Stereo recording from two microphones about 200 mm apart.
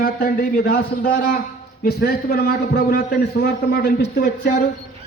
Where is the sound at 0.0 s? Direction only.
45° left (ahead or behind).